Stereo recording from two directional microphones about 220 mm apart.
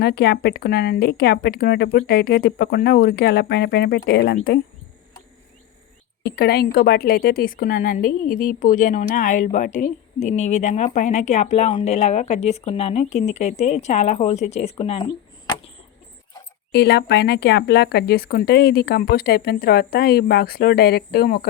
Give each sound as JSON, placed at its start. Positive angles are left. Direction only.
{"t": 0.0, "sound": "speech", "side_deg": 45}
{"t": 6.3, "sound": "a woman's voice", "side_deg": 45}
{"t": 16.7, "sound": "speech", "side_deg": 50}